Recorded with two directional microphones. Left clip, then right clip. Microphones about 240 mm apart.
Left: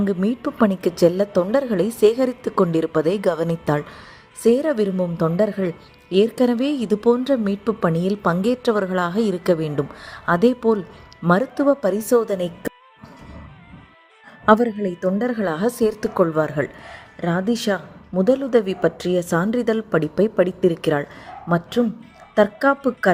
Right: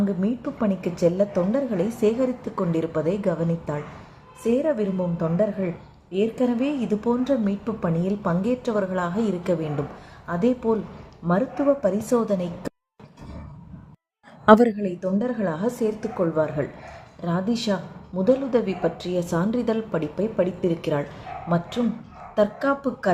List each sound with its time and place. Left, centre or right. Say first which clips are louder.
0.0 s a woman's voice: left 4 dB; left
14.4 s a woman's voice: right 1 dB; centre
14.8 s a woman's voice: left 4 dB; left